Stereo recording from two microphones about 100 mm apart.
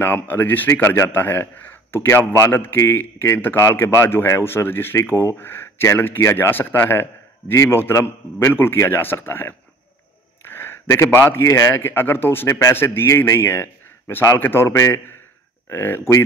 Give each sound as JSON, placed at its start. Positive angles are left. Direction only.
{"t": 0.0, "sound": "a man's voice", "side_deg": 20}
{"t": 10.5, "sound": "a sound", "side_deg": 25}
{"t": 11.1, "sound": "a man's voice", "side_deg": 25}